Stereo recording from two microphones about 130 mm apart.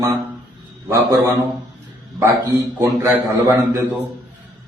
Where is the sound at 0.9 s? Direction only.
20° right (ahead or behind).